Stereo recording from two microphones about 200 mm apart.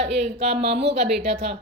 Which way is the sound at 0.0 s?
30° right (ahead or behind).